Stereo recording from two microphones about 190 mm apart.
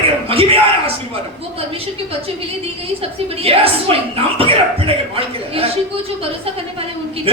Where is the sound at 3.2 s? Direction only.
30° right (ahead or behind).